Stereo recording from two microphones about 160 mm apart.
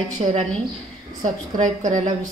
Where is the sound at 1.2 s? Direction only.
50° right (ahead or behind).